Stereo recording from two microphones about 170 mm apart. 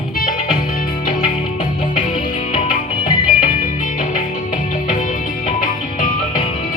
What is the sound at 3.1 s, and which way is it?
Music, 50° left (ahead or behind).